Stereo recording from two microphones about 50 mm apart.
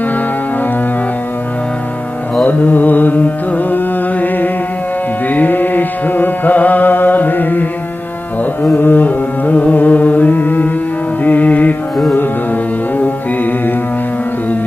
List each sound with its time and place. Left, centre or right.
2.4 s carnatic music: left
5.3 s music: left
8.8 s carnatic music: left